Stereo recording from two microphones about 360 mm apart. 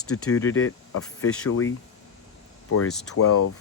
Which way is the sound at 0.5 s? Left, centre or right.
Left.